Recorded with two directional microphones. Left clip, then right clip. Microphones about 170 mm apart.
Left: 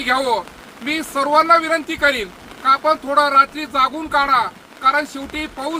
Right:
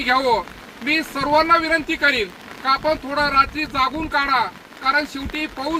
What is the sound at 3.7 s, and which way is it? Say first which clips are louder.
Speech: left 3 dB; 10° left (ahead or behind).